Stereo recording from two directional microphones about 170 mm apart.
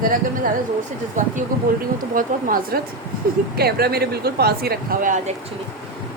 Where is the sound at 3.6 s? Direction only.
65° right (ahead or behind); by 5.4 s 50° right (ahead or behind).